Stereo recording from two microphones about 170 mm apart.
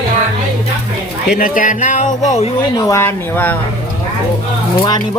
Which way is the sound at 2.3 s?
40° left (ahead or behind).